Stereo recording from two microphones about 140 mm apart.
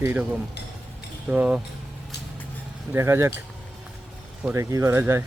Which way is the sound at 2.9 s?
20° right (ahead or behind).